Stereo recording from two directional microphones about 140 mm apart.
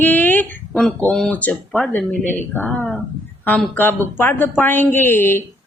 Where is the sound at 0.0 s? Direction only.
15° left (ahead or behind).